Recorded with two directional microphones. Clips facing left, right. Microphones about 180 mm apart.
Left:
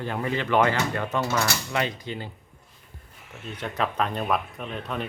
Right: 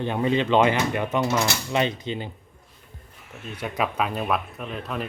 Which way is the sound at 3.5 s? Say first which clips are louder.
Right 1 dB; 10° right (ahead or behind).